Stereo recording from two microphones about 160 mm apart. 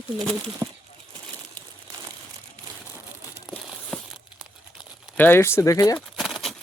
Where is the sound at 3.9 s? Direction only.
5° left (ahead or behind).